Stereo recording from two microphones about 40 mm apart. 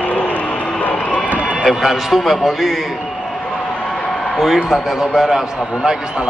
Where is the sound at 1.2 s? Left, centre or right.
Right.